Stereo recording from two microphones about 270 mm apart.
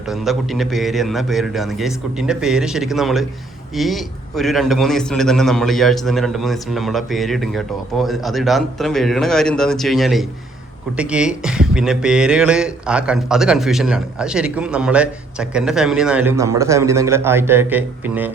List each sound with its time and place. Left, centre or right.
0.1 s speech: centre